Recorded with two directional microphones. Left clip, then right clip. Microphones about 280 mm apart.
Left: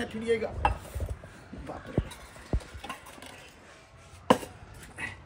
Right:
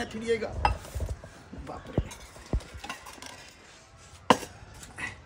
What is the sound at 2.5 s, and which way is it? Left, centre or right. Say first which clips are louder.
Stir: even; left.